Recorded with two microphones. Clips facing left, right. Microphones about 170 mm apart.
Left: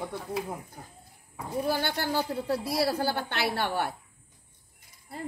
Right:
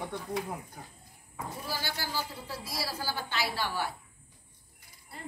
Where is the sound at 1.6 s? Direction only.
60° left (ahead or behind).